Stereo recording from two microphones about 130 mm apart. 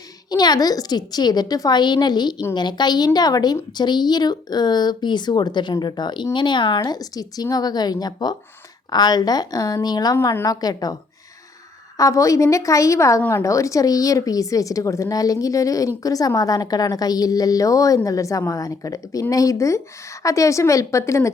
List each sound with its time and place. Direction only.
0.3 s a woman's voice: 30° left (ahead or behind)
11.9 s a woman's voice: 25° left (ahead or behind)